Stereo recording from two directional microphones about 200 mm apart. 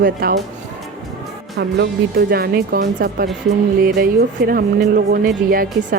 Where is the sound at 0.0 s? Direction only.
50° right (ahead or behind).